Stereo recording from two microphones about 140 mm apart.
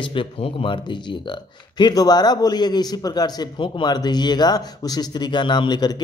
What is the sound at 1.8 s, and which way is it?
A man's voice, 30° left (ahead or behind).